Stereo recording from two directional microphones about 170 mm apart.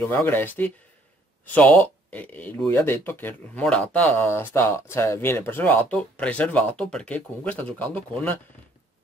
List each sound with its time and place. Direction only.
0.0 s speech: 10° left (ahead or behind)